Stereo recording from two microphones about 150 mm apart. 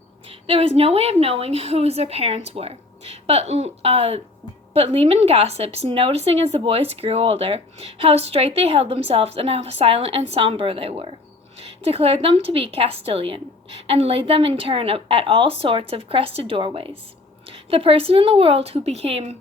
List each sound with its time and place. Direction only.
0.3 s speech: 40° right (ahead or behind)